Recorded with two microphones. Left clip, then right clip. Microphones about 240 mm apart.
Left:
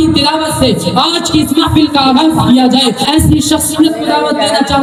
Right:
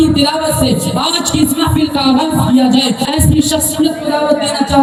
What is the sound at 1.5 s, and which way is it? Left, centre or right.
Speech, left.